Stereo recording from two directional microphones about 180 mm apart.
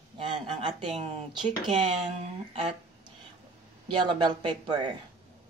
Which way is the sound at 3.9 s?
25° right (ahead or behind).